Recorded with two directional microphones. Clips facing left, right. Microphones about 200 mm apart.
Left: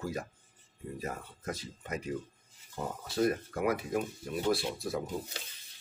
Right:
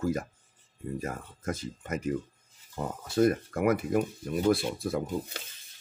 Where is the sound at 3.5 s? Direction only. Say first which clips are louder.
Right 5 dB; 55° right (ahead or behind).